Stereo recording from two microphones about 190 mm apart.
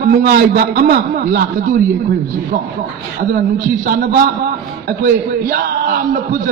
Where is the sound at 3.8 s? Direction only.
45° right (ahead or behind).